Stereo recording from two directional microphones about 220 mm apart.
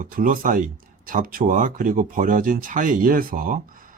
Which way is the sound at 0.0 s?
40° right (ahead or behind).